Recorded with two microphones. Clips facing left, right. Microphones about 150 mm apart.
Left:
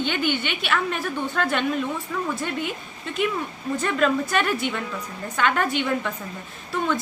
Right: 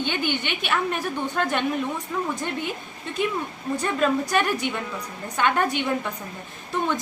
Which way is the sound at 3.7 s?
15° right (ahead or behind).